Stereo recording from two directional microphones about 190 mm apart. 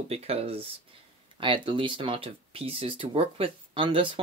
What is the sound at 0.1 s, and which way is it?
Speech, 30° right (ahead or behind).